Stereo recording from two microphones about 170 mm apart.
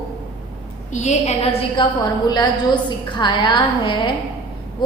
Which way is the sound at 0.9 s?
45° left (ahead or behind).